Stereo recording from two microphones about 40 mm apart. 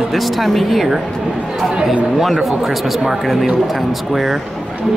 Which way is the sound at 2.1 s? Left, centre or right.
Centre.